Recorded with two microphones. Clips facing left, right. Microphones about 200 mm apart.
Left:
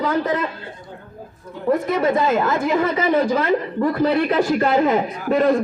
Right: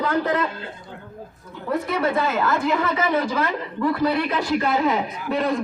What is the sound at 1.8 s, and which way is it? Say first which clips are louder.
A man's voice: left 4 dB; 45° left (ahead or behind).